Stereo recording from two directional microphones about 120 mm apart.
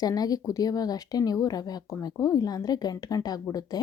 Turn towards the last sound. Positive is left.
turn(degrees=30)  # may be behind; listen again after turning